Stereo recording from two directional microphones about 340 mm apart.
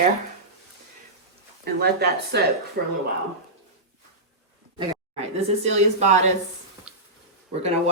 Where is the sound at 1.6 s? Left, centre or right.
Right.